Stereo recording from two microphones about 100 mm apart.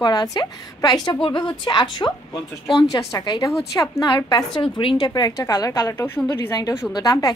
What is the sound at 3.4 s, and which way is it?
Speech, 30° left (ahead or behind).